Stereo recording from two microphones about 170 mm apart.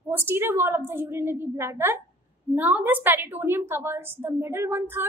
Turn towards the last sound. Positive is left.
turn(degrees=-15)  # may be behind; listen again after turning